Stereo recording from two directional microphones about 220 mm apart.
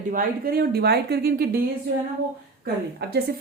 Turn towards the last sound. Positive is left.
turn(degrees=-45)  # may be behind; listen again after turning